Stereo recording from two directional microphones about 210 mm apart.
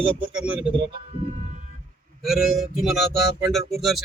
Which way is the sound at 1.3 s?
35° right (ahead or behind).